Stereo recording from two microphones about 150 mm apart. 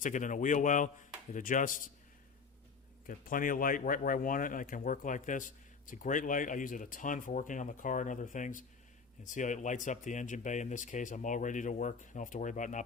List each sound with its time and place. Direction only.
0.0 s speech: 60° left (ahead or behind)
3.1 s speech: 65° left (ahead or behind)